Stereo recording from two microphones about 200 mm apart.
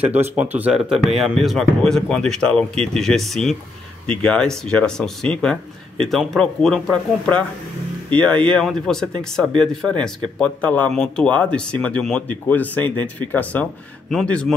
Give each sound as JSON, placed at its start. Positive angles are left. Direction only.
{"t": 0.0, "sound": "speech", "side_deg": -10}